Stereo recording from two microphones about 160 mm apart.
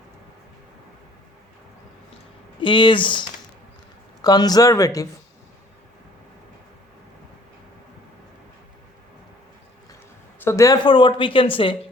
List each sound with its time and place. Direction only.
2.6 s speech: 30° left (ahead or behind)
10.4 s speech: 20° left (ahead or behind)
10.8 s speech: 30° left (ahead or behind)